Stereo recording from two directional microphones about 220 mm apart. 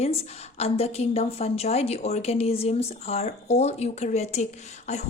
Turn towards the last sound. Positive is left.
turn(degrees=30)  # may be behind; listen again after turning